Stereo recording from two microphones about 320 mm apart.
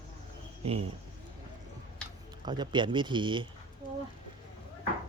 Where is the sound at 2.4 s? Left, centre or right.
Centre.